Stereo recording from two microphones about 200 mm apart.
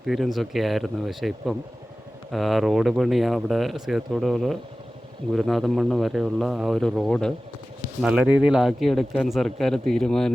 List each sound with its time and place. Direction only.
0.0 s speech: centre (ahead or behind)